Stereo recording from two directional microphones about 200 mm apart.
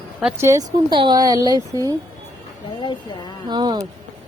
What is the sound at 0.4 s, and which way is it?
Speech, 20° right (ahead or behind).